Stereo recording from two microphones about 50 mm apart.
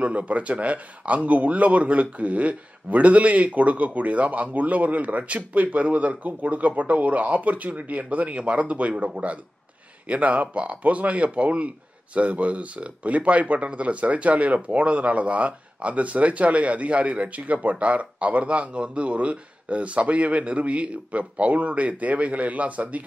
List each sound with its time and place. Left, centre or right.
0.0 s speech: right